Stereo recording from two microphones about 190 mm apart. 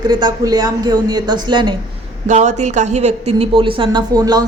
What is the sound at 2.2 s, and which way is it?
Speech, 40° right (ahead or behind).